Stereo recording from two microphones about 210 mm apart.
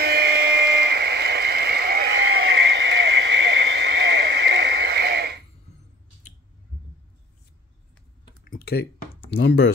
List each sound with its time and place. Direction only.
0.0 s a sound: 50° right (ahead or behind)
8.5 s typing: 45° left (ahead or behind)
9.3 s speech: 55° left (ahead or behind)